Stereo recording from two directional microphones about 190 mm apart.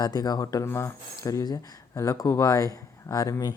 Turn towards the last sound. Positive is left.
turn(degrees=20)  # may be behind; listen again after turning